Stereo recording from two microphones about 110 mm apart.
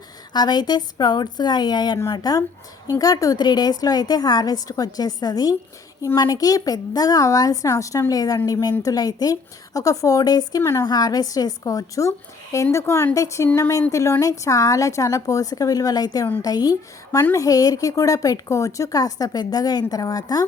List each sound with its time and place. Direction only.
0.3 s a woman's voice: 40° left (ahead or behind)
10.6 s speech: 25° left (ahead or behind)
10.8 s a woman's voice: 40° left (ahead or behind)